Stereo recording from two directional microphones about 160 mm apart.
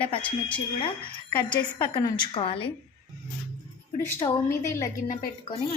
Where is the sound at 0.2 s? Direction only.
10° left (ahead or behind).